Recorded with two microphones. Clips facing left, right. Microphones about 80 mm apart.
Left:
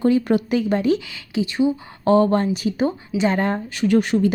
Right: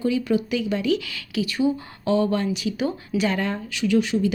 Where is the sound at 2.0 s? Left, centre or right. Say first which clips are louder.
Left 5 dB; left.